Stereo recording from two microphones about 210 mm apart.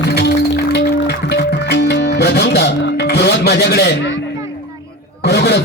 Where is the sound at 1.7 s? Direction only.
55° left (ahead or behind).